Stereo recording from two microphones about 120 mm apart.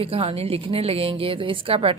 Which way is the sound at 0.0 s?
50° right (ahead or behind).